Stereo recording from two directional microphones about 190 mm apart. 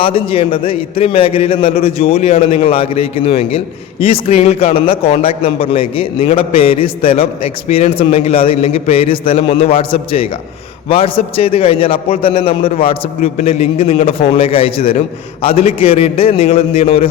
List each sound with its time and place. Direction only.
0.0 s a man's voice: 30° left (ahead or behind)